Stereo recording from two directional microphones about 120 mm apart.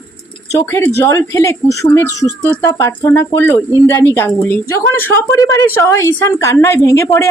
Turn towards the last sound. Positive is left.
turn(degrees=25)  # may be behind; listen again after turning